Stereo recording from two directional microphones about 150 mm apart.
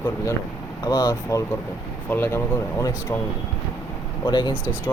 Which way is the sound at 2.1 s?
15° left (ahead or behind).